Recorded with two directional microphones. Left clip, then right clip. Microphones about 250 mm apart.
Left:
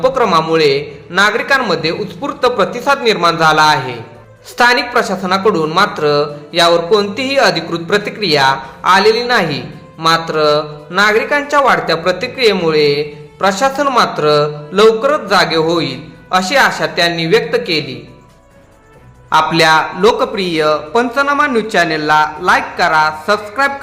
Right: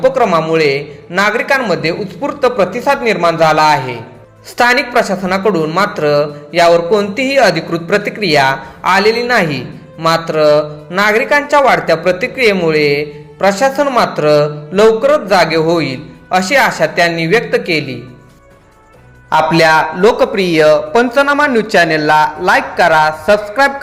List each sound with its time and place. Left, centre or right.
0.0 s a man's voice: centre
19.3 s a woman's voice: centre
20.9 s a woman's voice: centre